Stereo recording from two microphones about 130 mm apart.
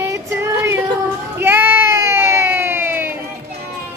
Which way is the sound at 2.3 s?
20° right (ahead or behind).